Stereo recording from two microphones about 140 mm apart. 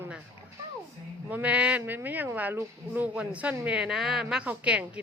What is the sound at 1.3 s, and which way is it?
A woman's voice, 10° right (ahead or behind).